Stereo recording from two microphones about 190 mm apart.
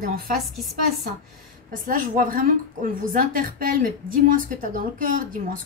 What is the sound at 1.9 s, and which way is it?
A woman's voice, 45° right (ahead or behind).